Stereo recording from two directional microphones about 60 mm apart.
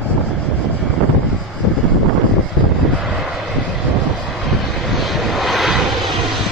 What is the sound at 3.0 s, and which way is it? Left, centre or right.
Vehicle, centre.